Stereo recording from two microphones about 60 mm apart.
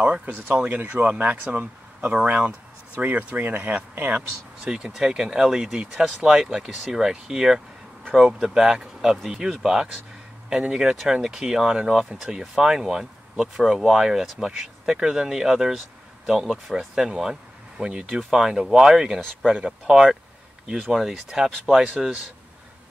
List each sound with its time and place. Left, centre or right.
0.0 s speech: centre
4.6 s speech: centre